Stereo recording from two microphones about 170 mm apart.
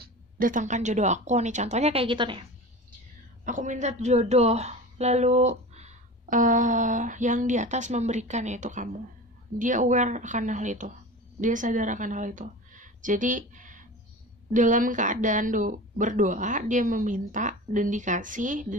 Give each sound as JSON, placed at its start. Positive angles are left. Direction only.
{"t": 0.0, "sound": "a woman's voice", "side_deg": -55}
{"t": 3.4, "sound": "a woman's voice", "side_deg": -45}